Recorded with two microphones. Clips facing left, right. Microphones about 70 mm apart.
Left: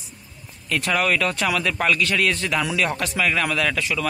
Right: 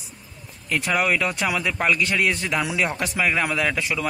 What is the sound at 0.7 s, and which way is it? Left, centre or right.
A man's voice, centre.